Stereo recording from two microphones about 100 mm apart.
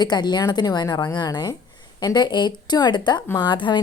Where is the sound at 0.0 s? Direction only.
45° left (ahead or behind).